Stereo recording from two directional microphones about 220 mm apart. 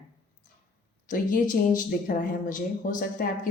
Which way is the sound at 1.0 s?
40° left (ahead or behind).